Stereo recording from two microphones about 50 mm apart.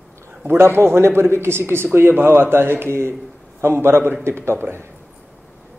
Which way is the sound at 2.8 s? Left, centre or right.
Right.